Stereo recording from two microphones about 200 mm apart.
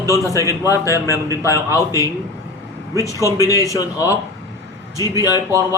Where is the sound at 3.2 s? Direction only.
15° right (ahead or behind).